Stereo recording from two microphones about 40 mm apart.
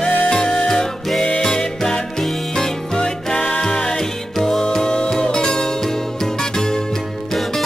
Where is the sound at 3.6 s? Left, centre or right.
Centre.